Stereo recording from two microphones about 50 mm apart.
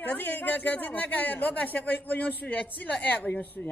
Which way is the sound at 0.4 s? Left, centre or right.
Left.